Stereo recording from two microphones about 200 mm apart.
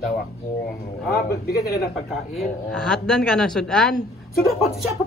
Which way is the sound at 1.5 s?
50° left (ahead or behind).